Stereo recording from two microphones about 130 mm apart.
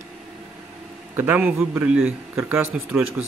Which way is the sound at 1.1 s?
15° right (ahead or behind).